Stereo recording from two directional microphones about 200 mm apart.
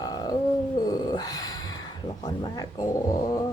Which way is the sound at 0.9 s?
20° left (ahead or behind).